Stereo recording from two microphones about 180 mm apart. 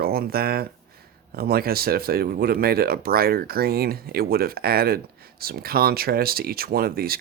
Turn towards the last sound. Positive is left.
turn(degrees=-55)  # may be behind; listen again after turning